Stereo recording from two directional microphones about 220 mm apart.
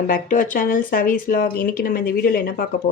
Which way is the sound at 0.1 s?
40° left (ahead or behind).